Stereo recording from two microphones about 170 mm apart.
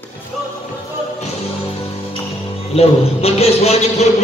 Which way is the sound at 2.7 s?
35° left (ahead or behind).